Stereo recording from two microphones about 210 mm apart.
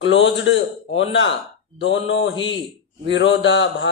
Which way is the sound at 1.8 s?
60° left (ahead or behind).